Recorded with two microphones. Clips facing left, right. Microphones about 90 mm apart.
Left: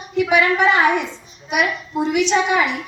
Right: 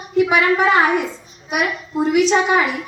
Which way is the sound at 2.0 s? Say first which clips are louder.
Right 3 dB; 40° right (ahead or behind).